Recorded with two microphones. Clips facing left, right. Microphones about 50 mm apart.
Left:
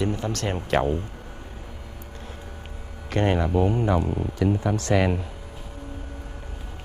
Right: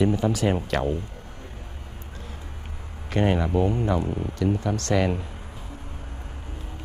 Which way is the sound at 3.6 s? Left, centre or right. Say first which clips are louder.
Left 1 dB; centre.